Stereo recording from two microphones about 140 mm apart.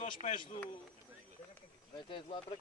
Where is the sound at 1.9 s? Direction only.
35° left (ahead or behind).